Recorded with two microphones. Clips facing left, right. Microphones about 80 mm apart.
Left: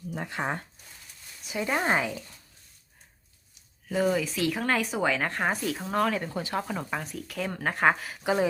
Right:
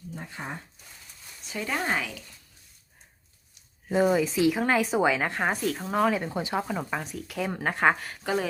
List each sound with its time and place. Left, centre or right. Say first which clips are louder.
0.1 s speech: left 6 dB; left
1.5 s speech: left 3 dB; centre
3.8 s speech: right 3 dB; right; by 8.2 s centre
8.2 s speech: left 4 dB; centre